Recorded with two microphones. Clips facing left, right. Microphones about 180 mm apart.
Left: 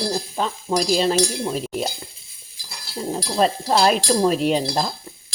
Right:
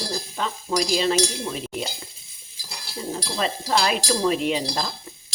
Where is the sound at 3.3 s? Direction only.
40° left (ahead or behind).